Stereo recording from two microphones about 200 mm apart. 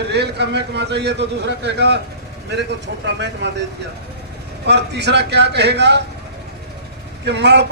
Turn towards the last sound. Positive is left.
turn(degrees=-55)  # may be behind; listen again after turning